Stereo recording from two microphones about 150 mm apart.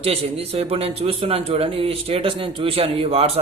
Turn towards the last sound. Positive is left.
turn(degrees=-45)  # may be behind; listen again after turning